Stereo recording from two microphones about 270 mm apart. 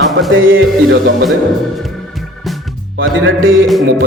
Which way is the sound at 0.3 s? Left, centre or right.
Right.